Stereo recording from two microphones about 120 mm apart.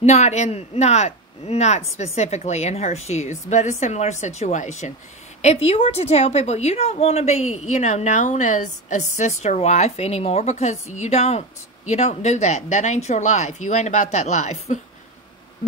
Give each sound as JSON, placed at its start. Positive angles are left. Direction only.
{"t": 0.0, "sound": "a man's voice", "side_deg": 70}
{"t": 5.4, "sound": "a woman's voice", "side_deg": 60}